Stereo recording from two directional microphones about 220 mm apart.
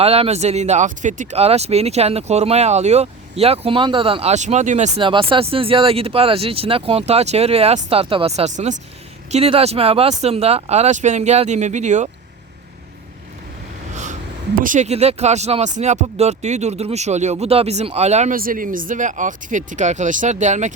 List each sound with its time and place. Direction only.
0.0 s speech: 25° right (ahead or behind)
13.9 s speech: 35° right (ahead or behind)